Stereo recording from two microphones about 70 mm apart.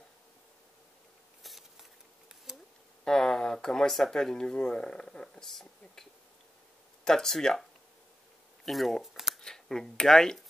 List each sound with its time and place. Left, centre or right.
1.4 s a sound: centre
3.1 s speech: centre
7.1 s speech: centre
8.6 s speech: centre
9.4 s speech: centre